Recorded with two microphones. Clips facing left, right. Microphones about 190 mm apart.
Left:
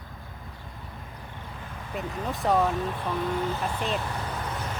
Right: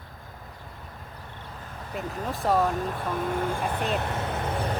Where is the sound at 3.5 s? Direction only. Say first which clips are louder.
Right 2 dB; 60° right (ahead or behind).